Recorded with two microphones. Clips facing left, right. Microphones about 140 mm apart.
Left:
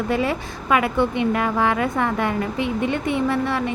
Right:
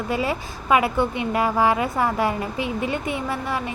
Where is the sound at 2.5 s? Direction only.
30° left (ahead or behind).